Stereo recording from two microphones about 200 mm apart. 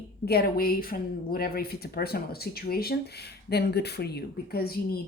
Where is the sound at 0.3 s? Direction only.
50° left (ahead or behind).